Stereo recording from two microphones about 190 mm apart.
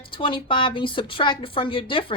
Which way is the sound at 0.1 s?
25° left (ahead or behind).